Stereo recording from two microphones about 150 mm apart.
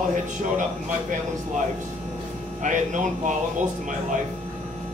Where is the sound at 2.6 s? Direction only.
55° right (ahead or behind).